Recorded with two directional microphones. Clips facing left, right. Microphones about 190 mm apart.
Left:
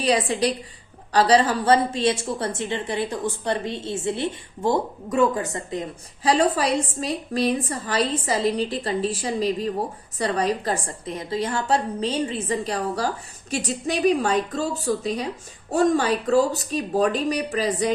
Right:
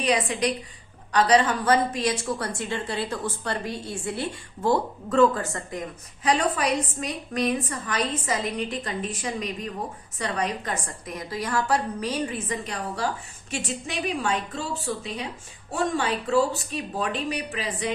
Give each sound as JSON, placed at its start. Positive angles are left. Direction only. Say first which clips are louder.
{"t": 0.0, "sound": "a woman's voice", "louder": "left 3 dB", "side_deg": 30}
{"t": 6.2, "sound": "a woman's voice", "louder": "left 3 dB", "side_deg": 30}